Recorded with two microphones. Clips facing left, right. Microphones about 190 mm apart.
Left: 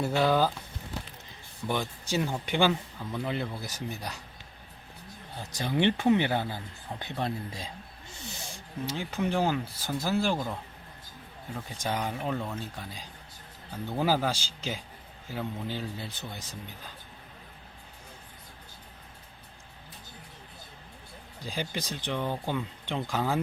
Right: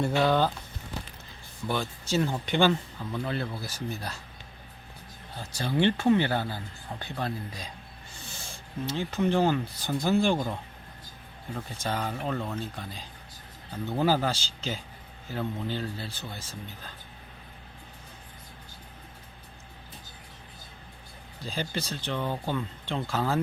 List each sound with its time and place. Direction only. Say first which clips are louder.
0.0 s speech: right 1 dB; 5° left (ahead or behind)
1.6 s speech: even; 15° left (ahead or behind)
5.4 s speech: right 1 dB; 20° left (ahead or behind)
8.5 s speech: right 3 dB; 10° left (ahead or behind)
11.5 s speech: even; 15° left (ahead or behind)
21.4 s speech: right 1 dB; 15° left (ahead or behind)